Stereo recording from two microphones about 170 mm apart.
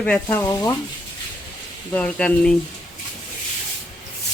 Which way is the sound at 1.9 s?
10° left (ahead or behind).